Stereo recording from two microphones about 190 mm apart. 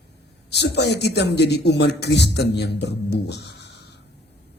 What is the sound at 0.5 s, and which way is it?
A man's voice, 65° left (ahead or behind).